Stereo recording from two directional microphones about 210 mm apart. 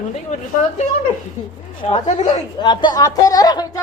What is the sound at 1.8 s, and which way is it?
Speech, 25° left (ahead or behind).